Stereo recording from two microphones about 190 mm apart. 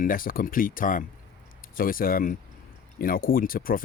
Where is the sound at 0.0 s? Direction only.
45° left (ahead or behind).